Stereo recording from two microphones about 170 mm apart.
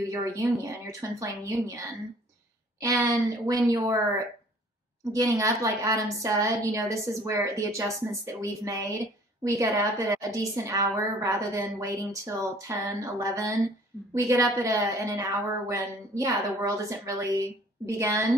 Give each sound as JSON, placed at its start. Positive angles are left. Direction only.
{"t": 0.0, "sound": "a woman's voice", "side_deg": -20}